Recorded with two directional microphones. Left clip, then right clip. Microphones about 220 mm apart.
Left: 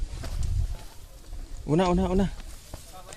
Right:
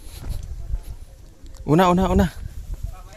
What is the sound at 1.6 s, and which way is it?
Speech, 50° right (ahead or behind).